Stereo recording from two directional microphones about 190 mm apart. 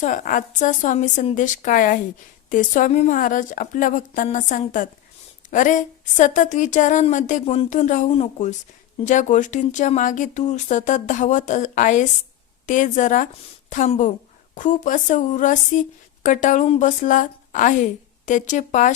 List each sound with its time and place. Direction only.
0.0 s a woman's voice: 40° left (ahead or behind)